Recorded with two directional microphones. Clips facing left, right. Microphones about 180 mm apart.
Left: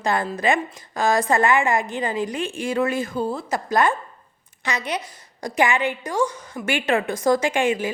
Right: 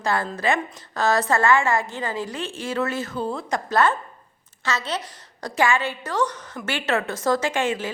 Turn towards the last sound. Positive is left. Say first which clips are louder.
# left 3 dB
turn(degrees=15)  # may be behind; listen again after turning